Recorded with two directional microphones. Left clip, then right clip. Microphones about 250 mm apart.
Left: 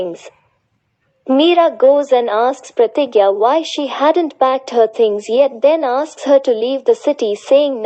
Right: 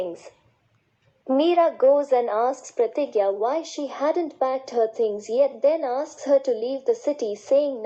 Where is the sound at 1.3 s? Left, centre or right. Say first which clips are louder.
Left 8 dB; left.